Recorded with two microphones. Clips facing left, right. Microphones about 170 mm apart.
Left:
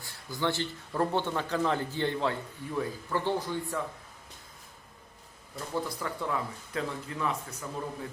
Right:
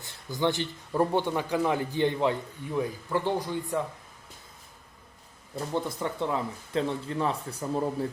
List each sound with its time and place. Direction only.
0.0 s a man's voice: 20° right (ahead or behind)
5.5 s speech: 25° right (ahead or behind)